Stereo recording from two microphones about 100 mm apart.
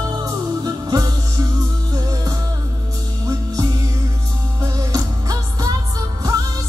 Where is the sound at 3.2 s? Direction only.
40° right (ahead or behind).